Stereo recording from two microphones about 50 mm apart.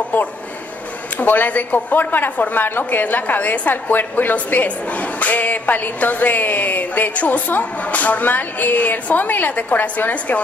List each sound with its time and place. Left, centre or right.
1.2 s speech: left